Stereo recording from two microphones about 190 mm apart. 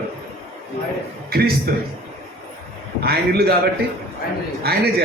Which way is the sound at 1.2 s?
55° right (ahead or behind).